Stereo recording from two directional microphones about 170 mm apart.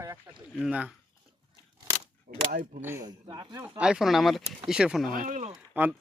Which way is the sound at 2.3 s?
55° right (ahead or behind).